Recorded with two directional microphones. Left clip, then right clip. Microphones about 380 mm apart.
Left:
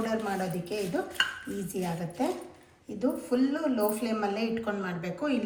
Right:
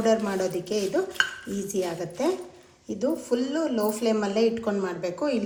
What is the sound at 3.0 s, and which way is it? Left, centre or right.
A woman's voice, centre.